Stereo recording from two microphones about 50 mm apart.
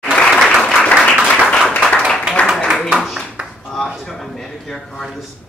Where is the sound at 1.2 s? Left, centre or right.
Centre.